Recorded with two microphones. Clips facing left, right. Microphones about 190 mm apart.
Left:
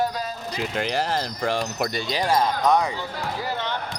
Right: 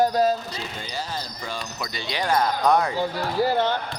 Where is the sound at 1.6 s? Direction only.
50° left (ahead or behind).